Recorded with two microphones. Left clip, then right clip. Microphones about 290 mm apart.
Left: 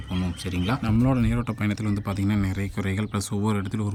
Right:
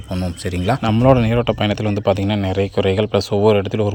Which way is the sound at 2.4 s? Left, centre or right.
Right.